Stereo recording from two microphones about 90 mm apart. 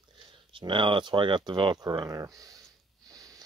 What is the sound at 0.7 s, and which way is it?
Speech, 70° right (ahead or behind).